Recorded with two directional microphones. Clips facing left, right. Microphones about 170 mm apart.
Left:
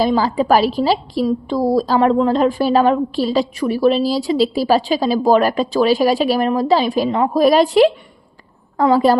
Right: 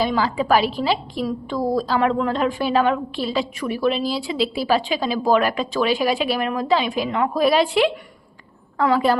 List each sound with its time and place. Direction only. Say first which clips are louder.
0.0 s a woman's voice: left 5 dB; 40° left (ahead or behind)